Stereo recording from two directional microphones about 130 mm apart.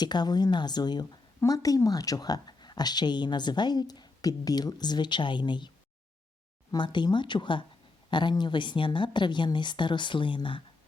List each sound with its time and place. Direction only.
0.0 s a woman's voice: 35° left (ahead or behind)